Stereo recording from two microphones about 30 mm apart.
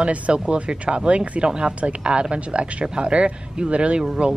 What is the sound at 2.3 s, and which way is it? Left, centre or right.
Speech, right.